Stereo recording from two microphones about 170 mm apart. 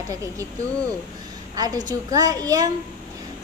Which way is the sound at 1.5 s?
20° right (ahead or behind).